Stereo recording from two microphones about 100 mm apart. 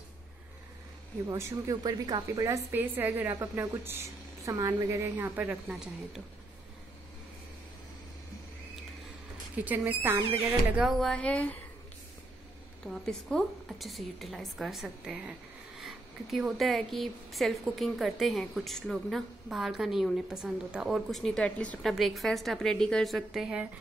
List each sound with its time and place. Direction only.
1.2 s speech: 30° right (ahead or behind)
2.2 s speech: 30° right (ahead or behind)
2.7 s a woman's voice: 20° right (ahead or behind)
5.1 s a woman's voice: 20° right (ahead or behind)
5.7 s a woman's voice: 5° right (ahead or behind)
9.6 s speech: 15° right (ahead or behind)
10.8 s speech: centre (ahead or behind)
12.8 s a woman's voice: 5° left (ahead or behind)
21.9 s a woman's voice: centre (ahead or behind)